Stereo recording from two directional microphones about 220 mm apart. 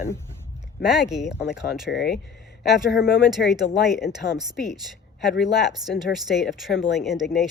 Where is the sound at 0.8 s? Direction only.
Centre (ahead or behind).